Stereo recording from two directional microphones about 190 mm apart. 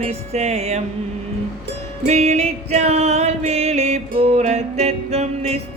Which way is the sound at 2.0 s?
35° right (ahead or behind).